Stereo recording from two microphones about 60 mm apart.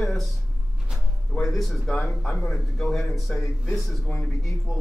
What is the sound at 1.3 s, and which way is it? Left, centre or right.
A man's voice, centre.